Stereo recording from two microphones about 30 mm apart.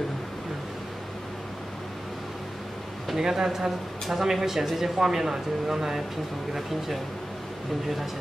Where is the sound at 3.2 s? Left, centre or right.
Centre.